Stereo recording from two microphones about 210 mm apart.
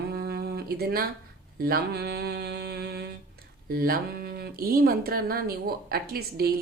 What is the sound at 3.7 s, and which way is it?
Speech, 45° right (ahead or behind).